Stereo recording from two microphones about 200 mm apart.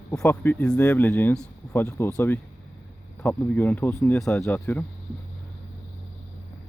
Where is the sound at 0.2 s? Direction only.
10° left (ahead or behind).